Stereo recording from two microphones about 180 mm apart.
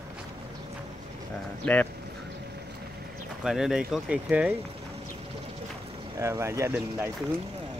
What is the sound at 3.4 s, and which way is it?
Speech, centre (ahead or behind).